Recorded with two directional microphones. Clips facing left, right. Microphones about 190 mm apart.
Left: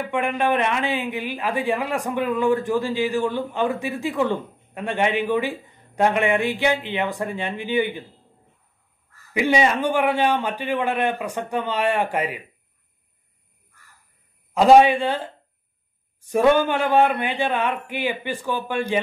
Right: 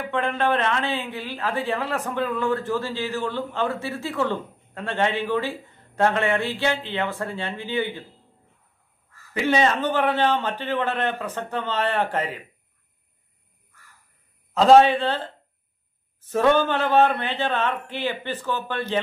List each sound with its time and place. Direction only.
0.1 s a man's voice: 15° left (ahead or behind)
9.3 s a man's voice: 15° left (ahead or behind)
14.5 s a man's voice: 10° left (ahead or behind)